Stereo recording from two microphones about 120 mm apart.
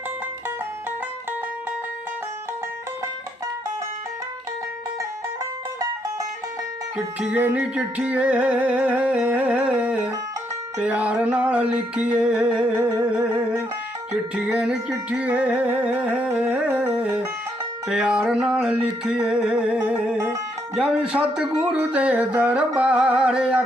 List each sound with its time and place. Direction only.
6.9 s music: 10° right (ahead or behind)
14.3 s music: 10° right (ahead or behind)
20.1 s music: 25° right (ahead or behind)
20.7 s music: 5° right (ahead or behind)